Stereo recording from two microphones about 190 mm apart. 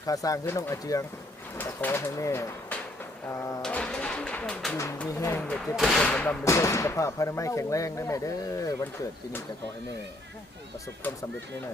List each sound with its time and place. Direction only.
0.0 s speech: 20° left (ahead or behind)
11.0 s speech: 10° left (ahead or behind)